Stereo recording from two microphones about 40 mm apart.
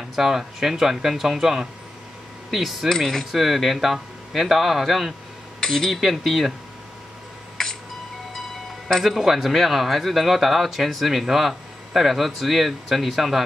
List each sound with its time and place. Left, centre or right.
0.1 s speech: centre
2.9 s speech: centre
5.6 s speech: centre
5.9 s speech: centre
9.0 s speech: centre